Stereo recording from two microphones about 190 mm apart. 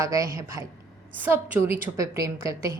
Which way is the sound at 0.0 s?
15° right (ahead or behind).